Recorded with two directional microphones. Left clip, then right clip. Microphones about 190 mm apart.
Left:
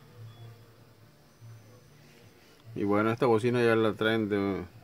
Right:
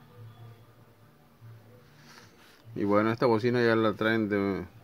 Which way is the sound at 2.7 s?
5° left (ahead or behind).